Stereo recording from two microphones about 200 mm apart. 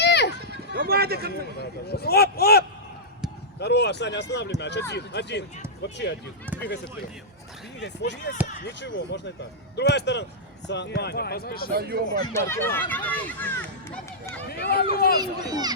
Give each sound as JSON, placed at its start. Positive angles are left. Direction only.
{"t": 0.0, "sound": "a sound", "side_deg": 55}
{"t": 0.4, "sound": "a sound", "side_deg": -55}
{"t": 1.5, "sound": "a man's voice", "side_deg": 55}
{"t": 7.8, "sound": "a man's voice", "side_deg": 60}
{"t": 11.7, "sound": "speech", "side_deg": -50}
{"t": 12.2, "sound": "speech", "side_deg": 15}
{"t": 14.5, "sound": "a man's voice", "side_deg": 50}
{"t": 15.2, "sound": "speech", "side_deg": -20}